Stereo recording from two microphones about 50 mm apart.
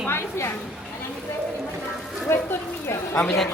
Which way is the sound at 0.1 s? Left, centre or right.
Left.